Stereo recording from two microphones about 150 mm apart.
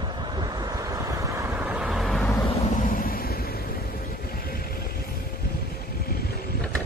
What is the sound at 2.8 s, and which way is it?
Vehicle, 65° left (ahead or behind).